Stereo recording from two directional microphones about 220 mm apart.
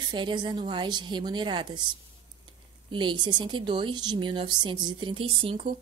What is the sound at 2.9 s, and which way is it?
A woman's voice, 20° right (ahead or behind).